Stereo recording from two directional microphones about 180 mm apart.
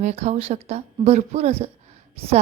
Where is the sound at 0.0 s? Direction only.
40° right (ahead or behind).